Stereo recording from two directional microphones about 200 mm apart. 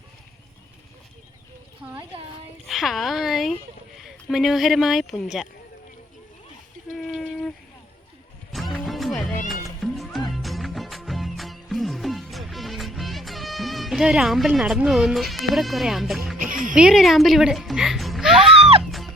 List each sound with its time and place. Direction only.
2.6 s speech: centre (ahead or behind)
8.5 s music: centre (ahead or behind)
16.4 s speech: 40° right (ahead or behind)
16.7 s speech: 5° right (ahead or behind)
18.8 s music: centre (ahead or behind)